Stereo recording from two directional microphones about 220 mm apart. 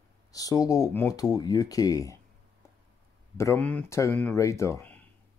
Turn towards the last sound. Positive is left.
turn(degrees=10)  # may be behind; listen again after turning